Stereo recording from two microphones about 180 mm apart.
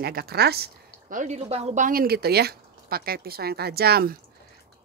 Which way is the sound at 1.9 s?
55° right (ahead or behind).